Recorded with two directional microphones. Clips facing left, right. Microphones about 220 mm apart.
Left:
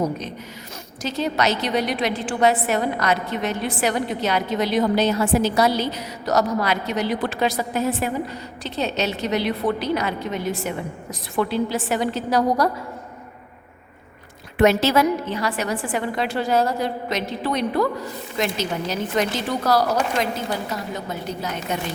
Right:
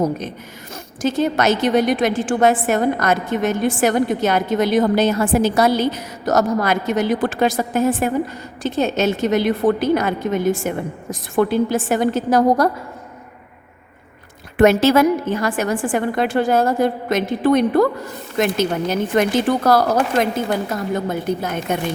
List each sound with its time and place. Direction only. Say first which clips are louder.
0.0 s a woman's voice: right 4 dB; 50° right (ahead or behind)
14.6 s a woman's voice: right 4 dB; 50° right (ahead or behind)